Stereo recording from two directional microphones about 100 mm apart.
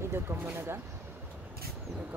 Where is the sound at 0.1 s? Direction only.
25° right (ahead or behind).